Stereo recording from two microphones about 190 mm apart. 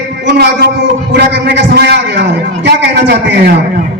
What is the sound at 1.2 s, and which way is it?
A man's voice, 65° right (ahead or behind).